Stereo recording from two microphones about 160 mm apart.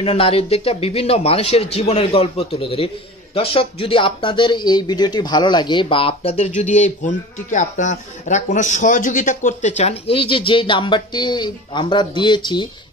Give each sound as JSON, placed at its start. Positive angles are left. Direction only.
{"t": 0.0, "sound": "speech", "side_deg": 35}